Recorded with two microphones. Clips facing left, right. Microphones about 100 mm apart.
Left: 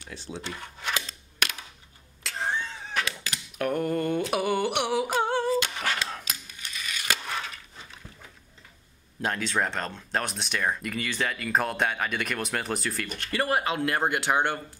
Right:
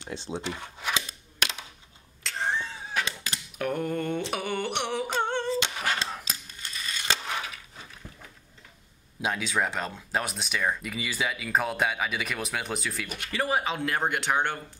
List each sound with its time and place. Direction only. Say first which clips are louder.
0.0 s speech: right 4 dB; 25° right (ahead or behind)
2.2 s a sound: even; centre (ahead or behind)
3.5 s speech: left 2 dB; centre (ahead or behind)
4.3 s humming: left 4 dB; 5° left (ahead or behind)
6.2 s a sound: even; 30° right (ahead or behind)
9.2 s speech: even; 5° right (ahead or behind)